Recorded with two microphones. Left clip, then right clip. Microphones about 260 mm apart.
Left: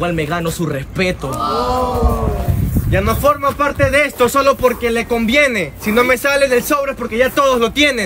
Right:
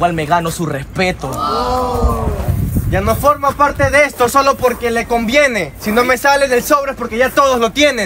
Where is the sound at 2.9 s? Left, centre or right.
Centre.